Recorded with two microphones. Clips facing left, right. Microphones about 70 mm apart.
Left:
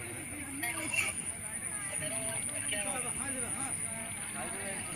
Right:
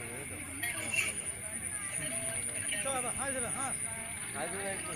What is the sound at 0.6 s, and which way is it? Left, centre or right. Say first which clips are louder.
Hubbub: even; centre.